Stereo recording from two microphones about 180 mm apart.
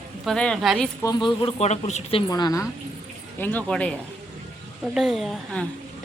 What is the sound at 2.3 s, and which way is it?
Speech, 20° left (ahead or behind).